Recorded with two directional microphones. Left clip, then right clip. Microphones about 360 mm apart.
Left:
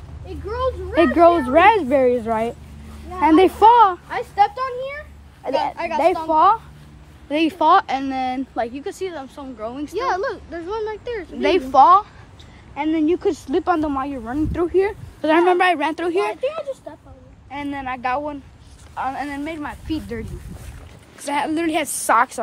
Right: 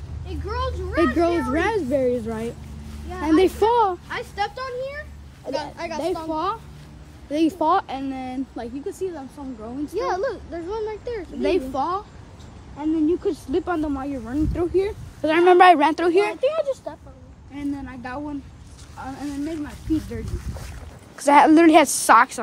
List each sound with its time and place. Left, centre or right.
0.5 s speech: centre
9.1 s speech: centre
9.9 s speech: left
15.4 s speech: centre
16.4 s speech: right
17.5 s speech: centre
21.3 s a woman's voice: centre
22.0 s speech: centre